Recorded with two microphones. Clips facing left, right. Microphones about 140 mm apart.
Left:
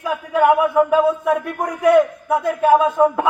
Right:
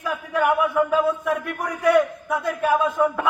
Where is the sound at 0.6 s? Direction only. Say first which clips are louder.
Left 5 dB; 25° left (ahead or behind).